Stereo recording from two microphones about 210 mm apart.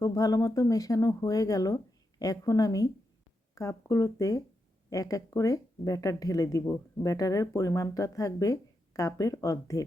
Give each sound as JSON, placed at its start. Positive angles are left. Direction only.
{"t": 0.0, "sound": "speech", "side_deg": 15}